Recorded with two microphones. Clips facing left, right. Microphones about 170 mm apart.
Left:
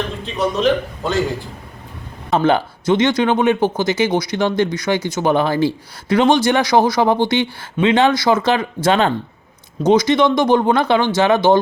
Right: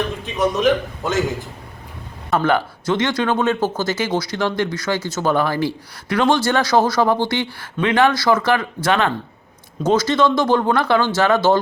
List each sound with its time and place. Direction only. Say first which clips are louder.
0.3 s a man's voice: even; 20° right (ahead or behind)
2.3 s speech: left 2 dB; 20° left (ahead or behind)
9.8 s speech: left 3 dB; 15° left (ahead or behind)